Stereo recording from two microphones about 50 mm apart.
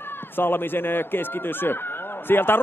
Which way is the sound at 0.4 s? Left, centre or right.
Left.